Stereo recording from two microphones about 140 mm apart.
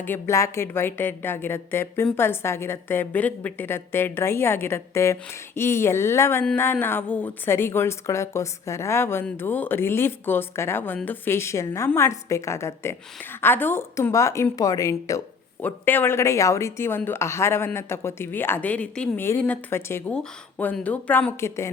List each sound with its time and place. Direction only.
0.0 s a woman's voice: 15° left (ahead or behind)